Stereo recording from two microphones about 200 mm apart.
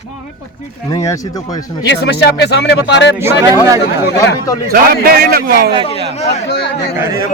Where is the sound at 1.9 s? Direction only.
55° left (ahead or behind).